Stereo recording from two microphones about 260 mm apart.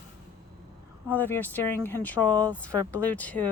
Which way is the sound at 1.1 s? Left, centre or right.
Centre.